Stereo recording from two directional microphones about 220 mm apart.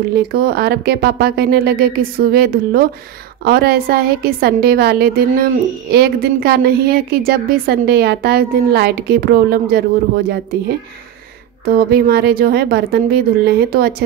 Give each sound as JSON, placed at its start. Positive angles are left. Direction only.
{"t": 0.3, "sound": "a woman's voice", "side_deg": -45}
{"t": 11.7, "sound": "a woman's voice", "side_deg": -45}